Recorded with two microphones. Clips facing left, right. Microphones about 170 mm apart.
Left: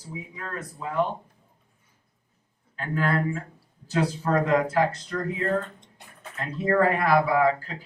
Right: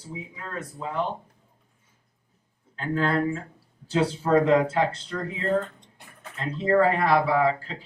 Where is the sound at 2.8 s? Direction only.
25° right (ahead or behind).